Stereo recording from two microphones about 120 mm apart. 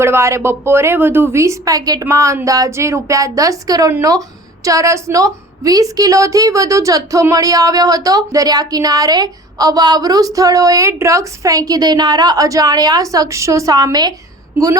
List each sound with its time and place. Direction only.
0.0 s a woman's voice: 20° right (ahead or behind)